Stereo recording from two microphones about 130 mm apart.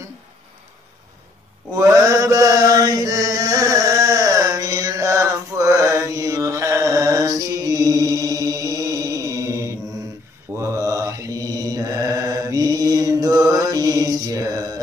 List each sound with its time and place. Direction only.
1.7 s chant: 25° right (ahead or behind)
10.5 s mantra: 20° right (ahead or behind)